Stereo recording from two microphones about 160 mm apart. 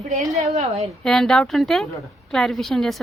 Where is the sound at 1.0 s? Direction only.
5° left (ahead or behind).